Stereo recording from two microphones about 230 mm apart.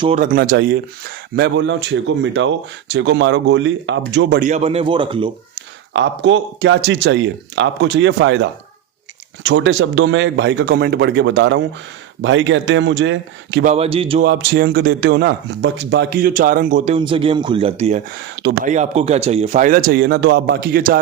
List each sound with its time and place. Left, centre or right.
0.0 s speech: right
4.4 s speech: right
5.9 s speech: right
13.7 s speech: right
14.3 s speech: right